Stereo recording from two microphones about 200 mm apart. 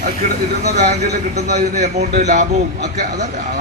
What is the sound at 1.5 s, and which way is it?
Speech, 35° right (ahead or behind).